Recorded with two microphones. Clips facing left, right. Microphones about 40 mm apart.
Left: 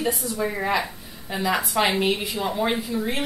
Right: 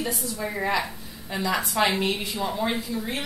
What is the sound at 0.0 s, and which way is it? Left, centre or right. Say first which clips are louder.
A woman's voice: left 4 dB; centre.